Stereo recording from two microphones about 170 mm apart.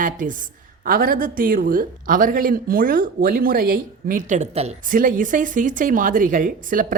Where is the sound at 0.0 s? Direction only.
50° right (ahead or behind).